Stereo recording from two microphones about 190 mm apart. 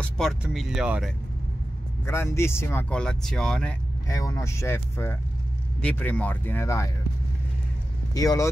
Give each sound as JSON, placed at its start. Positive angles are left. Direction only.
{"t": 0.0, "sound": "speech", "side_deg": 0}
{"t": 2.0, "sound": "speech", "side_deg": 15}
{"t": 4.1, "sound": "speech", "side_deg": 15}
{"t": 8.1, "sound": "speech", "side_deg": 20}